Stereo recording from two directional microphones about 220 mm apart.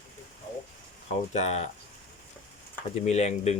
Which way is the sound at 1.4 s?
30° left (ahead or behind).